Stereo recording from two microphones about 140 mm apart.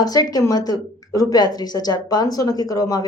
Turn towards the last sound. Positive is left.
turn(degrees=25)  # may be behind; listen again after turning